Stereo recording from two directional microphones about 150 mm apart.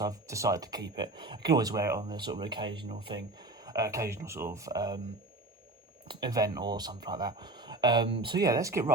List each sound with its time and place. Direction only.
0.0 s speech: 20° right (ahead or behind)
6.1 s speech: 30° right (ahead or behind)